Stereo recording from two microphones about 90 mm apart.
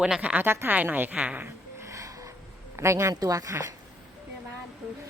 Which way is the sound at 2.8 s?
35° right (ahead or behind).